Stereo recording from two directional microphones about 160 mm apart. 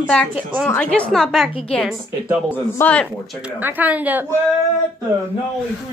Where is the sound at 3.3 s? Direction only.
10° right (ahead or behind).